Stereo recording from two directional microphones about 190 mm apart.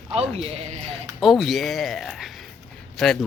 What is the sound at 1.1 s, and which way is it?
Speech, centre (ahead or behind).